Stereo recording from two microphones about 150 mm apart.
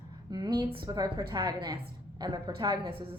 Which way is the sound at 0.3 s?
25° right (ahead or behind).